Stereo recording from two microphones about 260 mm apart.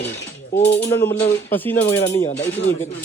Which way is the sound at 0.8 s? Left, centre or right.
Left.